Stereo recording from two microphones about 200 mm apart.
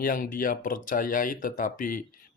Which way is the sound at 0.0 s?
45° left (ahead or behind).